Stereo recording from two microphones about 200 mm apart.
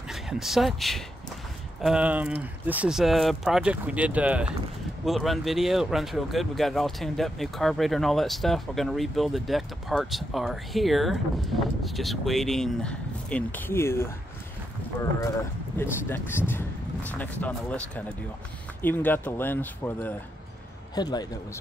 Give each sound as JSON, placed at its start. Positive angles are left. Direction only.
{"t": 0.1, "sound": "speech", "side_deg": 0}
{"t": 15.8, "sound": "speech", "side_deg": 10}
{"t": 20.9, "sound": "a man's voice", "side_deg": 20}